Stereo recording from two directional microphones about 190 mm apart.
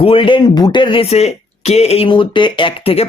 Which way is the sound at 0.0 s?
30° left (ahead or behind).